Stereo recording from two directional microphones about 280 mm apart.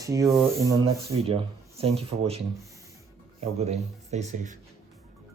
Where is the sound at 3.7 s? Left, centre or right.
Right.